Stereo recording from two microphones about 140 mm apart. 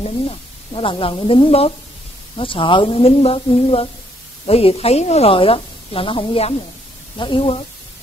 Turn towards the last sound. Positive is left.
turn(degrees=40)  # may be behind; listen again after turning